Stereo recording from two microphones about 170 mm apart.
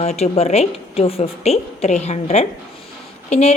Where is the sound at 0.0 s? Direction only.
40° left (ahead or behind).